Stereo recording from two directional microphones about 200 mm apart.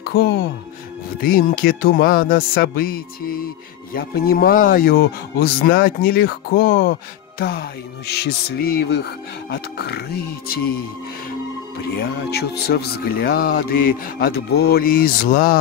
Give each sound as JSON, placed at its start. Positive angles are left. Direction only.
{"t": 0.0, "sound": "music", "side_deg": 55}
{"t": 1.2, "sound": "speech", "side_deg": 45}
{"t": 12.0, "sound": "speech", "side_deg": 55}